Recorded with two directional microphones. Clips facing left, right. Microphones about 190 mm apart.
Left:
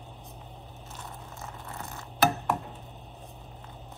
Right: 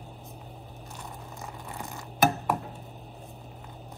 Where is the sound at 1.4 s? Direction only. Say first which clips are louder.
Right 2 dB; 15° right (ahead or behind).